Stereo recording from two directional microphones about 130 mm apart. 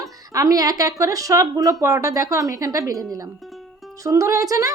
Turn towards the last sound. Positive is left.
turn(degrees=-25)  # may be behind; listen again after turning